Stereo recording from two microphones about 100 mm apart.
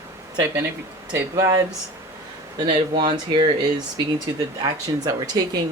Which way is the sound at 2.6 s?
50° right (ahead or behind).